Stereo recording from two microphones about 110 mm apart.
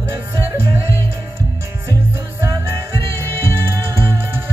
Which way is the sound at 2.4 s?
25° right (ahead or behind).